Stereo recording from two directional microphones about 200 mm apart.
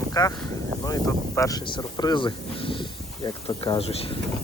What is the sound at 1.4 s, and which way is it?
Speech, 15° left (ahead or behind).